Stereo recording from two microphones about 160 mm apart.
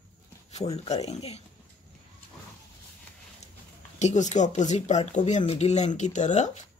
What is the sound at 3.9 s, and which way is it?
Speech, 45° left (ahead or behind).